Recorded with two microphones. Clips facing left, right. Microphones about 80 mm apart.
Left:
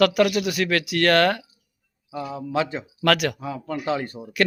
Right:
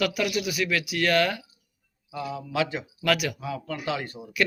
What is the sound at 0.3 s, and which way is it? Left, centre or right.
Speech, left.